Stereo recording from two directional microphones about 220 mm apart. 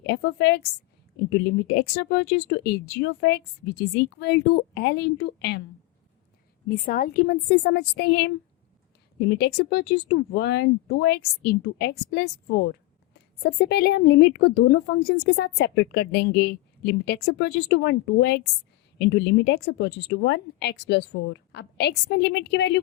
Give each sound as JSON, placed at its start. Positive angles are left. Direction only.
{"t": 0.0, "sound": "a woman's voice", "side_deg": 50}
{"t": 6.7, "sound": "a woman's voice", "side_deg": 40}